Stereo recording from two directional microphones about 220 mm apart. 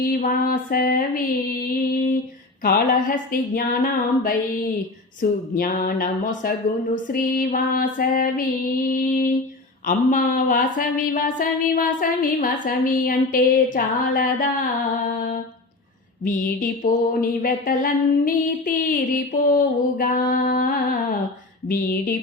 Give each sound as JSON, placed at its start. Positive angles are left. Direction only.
{"t": 0.0, "sound": "speech", "side_deg": 40}
{"t": 5.5, "sound": "speech", "side_deg": 40}
{"t": 16.2, "sound": "speech", "side_deg": 40}